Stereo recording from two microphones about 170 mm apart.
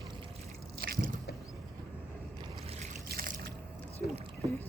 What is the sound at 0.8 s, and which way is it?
Squish, 60° right (ahead or behind).